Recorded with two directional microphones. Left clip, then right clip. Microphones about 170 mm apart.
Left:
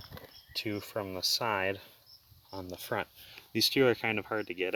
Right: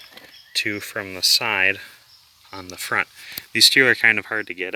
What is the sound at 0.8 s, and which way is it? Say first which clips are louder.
Speech: right 11 dB; centre (ahead or behind).